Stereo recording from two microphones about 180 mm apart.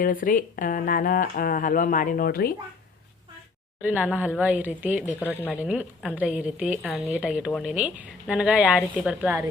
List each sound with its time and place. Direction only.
0.0 s speech: 50° left (ahead or behind)
3.8 s a woman's voice: 10° right (ahead or behind)
5.4 s a woman's voice: 10° left (ahead or behind)
5.6 s a woman's voice: 5° right (ahead or behind)